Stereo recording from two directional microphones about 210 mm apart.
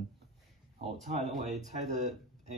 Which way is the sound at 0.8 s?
35° right (ahead or behind).